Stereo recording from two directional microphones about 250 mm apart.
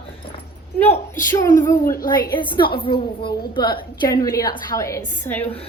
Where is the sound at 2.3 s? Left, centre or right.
Centre.